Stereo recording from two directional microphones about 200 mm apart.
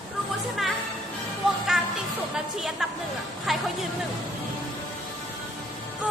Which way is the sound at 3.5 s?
Centre (ahead or behind).